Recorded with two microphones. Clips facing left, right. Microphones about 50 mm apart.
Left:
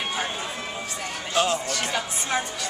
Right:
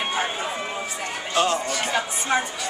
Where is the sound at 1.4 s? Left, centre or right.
Centre.